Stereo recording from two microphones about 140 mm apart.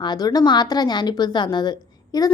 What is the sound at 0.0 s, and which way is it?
A woman's voice, 30° left (ahead or behind).